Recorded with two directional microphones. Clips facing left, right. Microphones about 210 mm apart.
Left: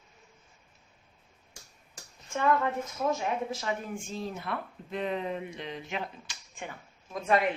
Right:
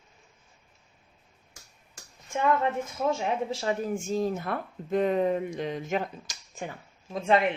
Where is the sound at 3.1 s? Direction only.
30° right (ahead or behind).